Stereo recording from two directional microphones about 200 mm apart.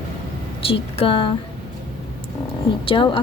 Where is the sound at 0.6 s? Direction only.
30° left (ahead or behind).